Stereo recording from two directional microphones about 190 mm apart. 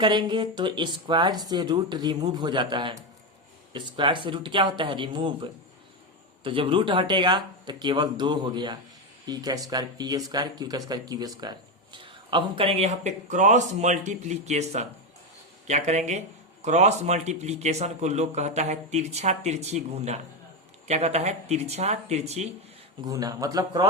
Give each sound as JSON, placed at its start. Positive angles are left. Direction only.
{"t": 0.0, "sound": "a man's voice", "side_deg": -25}
{"t": 23.0, "sound": "speech", "side_deg": -20}